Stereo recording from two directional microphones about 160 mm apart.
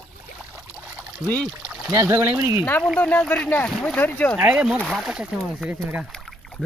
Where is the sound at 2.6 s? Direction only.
10° left (ahead or behind).